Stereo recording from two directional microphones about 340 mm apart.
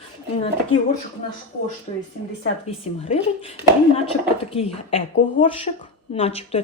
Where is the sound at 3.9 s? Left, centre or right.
Centre.